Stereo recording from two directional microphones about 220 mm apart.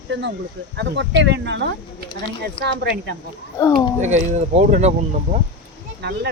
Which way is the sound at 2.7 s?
50° right (ahead or behind).